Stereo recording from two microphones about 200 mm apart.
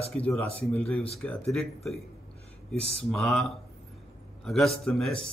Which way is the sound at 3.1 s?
Centre (ahead or behind).